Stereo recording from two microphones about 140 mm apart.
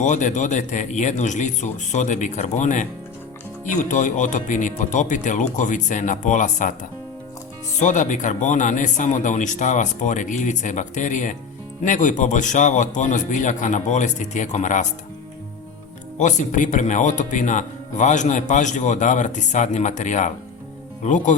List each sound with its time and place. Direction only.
0.0 s speech: 60° left (ahead or behind)
7.8 s speech: 65° left (ahead or behind)
16.1 s speech: 60° left (ahead or behind)